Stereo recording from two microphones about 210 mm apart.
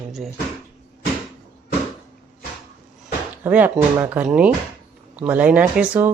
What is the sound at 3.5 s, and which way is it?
Speech, 5° right (ahead or behind).